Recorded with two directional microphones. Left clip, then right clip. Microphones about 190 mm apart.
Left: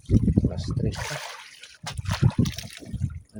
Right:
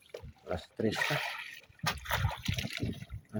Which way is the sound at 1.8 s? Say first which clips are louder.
Left 2 dB; 30° right (ahead or behind).